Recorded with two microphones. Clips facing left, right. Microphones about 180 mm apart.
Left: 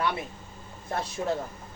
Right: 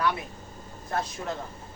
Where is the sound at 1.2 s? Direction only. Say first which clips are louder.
Left 5 dB; 20° left (ahead or behind).